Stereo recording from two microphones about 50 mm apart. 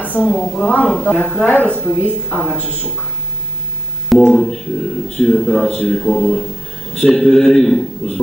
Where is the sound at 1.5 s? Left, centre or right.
Left.